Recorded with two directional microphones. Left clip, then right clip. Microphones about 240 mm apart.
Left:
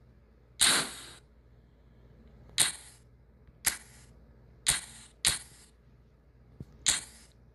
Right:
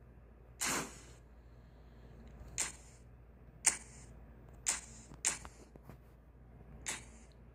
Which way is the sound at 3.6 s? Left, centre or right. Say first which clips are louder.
Left 2 dB; centre.